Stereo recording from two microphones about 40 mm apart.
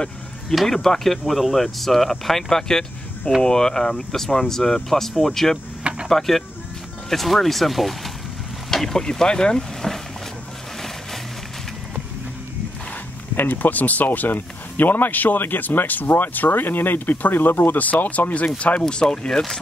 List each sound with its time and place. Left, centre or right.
0.5 s speech: centre
13.4 s speech: left
18.0 s speech: left
18.8 s speech: left